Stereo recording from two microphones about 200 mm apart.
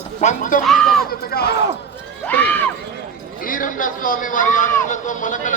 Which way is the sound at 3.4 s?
40° left (ahead or behind).